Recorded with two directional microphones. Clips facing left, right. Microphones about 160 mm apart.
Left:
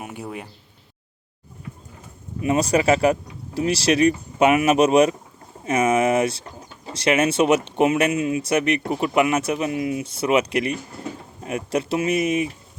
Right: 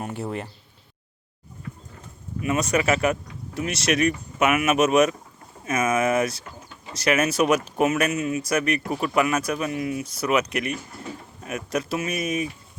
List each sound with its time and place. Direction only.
0.0 s speech: 10° left (ahead or behind)
2.4 s speech: 30° left (ahead or behind)